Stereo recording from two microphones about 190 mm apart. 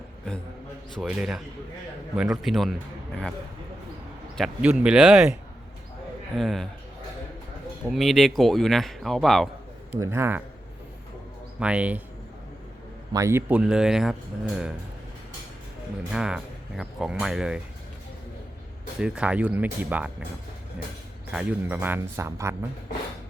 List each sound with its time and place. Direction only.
0.9 s speech: 5° right (ahead or behind)
4.4 s speech: 5° right (ahead or behind)
6.3 s speech: centre (ahead or behind)
7.9 s speech: centre (ahead or behind)
10.0 s speech: 15° right (ahead or behind)
11.6 s speech: 5° right (ahead or behind)
13.1 s speech: 15° right (ahead or behind)
16.1 s speech: 5° right (ahead or behind)
18.9 s speech: 5° right (ahead or behind)
21.2 s speech: 5° right (ahead or behind)